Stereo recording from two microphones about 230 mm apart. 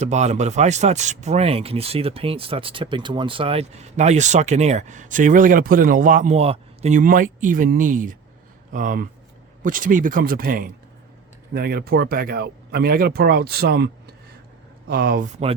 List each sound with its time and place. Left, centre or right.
0.0 s speech: right